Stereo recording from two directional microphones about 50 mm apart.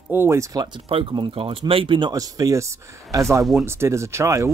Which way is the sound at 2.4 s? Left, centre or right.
Right.